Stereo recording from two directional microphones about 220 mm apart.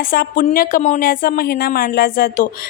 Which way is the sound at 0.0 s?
40° left (ahead or behind).